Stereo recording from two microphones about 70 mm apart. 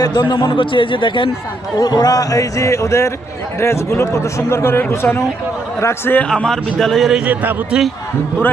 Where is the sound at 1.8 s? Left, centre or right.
Left.